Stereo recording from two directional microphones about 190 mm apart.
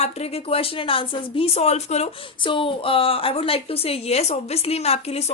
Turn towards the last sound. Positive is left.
turn(degrees=35)  # may be behind; listen again after turning